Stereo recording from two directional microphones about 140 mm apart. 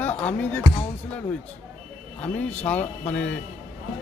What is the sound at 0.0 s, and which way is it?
Music, 10° left (ahead or behind).